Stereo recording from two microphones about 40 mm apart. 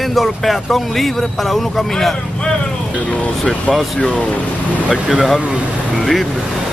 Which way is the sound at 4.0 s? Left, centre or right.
Left.